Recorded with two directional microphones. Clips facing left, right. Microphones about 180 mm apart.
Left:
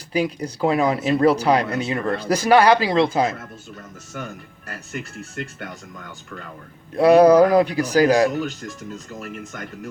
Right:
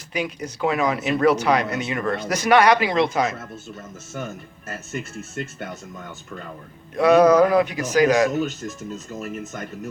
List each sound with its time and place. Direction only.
0.1 s speech: 35° left (ahead or behind)
3.8 s speech: 20° right (ahead or behind)
6.9 s speech: 30° left (ahead or behind)
9.2 s speech: 20° right (ahead or behind)